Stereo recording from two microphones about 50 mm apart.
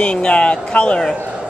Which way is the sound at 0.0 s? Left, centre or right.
Left.